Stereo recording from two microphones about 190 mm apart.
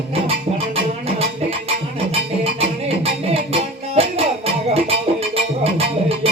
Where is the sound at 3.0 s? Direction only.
30° right (ahead or behind).